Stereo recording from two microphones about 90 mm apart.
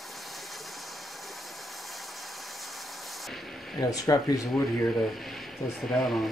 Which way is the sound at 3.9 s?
40° left (ahead or behind).